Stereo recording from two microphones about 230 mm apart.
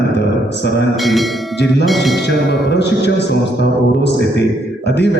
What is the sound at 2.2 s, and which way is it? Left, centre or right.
Music, left.